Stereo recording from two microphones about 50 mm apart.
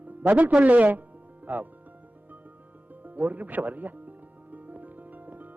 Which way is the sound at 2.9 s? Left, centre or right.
Right.